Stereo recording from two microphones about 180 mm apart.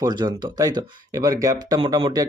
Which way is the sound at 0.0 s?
25° right (ahead or behind).